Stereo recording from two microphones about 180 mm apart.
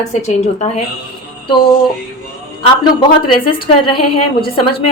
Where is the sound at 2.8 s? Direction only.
25° left (ahead or behind).